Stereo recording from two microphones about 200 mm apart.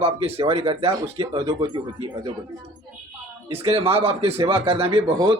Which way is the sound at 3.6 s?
25° right (ahead or behind).